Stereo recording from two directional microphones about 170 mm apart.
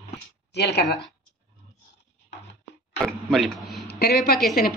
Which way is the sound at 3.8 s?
65° left (ahead or behind).